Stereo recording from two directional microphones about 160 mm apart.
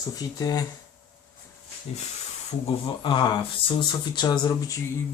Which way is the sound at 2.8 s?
30° left (ahead or behind).